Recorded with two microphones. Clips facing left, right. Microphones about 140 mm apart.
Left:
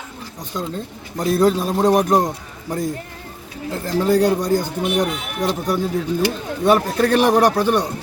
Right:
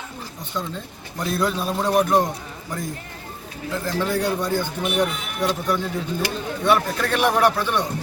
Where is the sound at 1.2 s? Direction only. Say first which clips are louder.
Left 7 dB; 45° left (ahead or behind).